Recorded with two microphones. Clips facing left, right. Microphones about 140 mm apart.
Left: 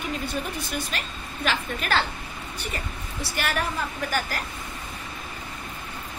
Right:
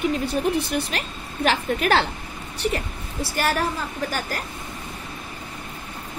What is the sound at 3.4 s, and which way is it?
Speech, 40° right (ahead or behind).